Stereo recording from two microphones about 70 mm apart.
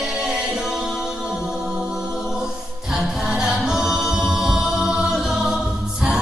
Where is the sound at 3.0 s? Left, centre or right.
Centre.